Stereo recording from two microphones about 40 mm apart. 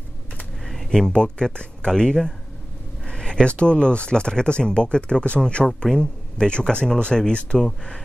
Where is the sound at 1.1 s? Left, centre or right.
Left.